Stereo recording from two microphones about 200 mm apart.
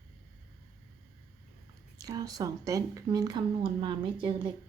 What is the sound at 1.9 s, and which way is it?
Speech, 15° right (ahead or behind).